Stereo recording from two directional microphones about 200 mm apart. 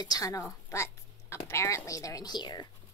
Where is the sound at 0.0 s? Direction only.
20° left (ahead or behind).